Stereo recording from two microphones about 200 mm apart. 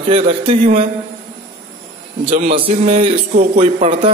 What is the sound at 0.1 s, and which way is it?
Speech, 30° right (ahead or behind).